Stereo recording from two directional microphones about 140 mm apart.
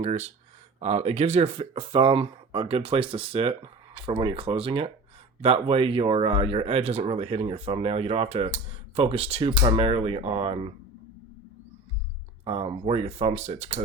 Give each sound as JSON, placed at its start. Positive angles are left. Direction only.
{"t": 0.0, "sound": "speech", "side_deg": -50}
{"t": 12.5, "sound": "speech", "side_deg": -45}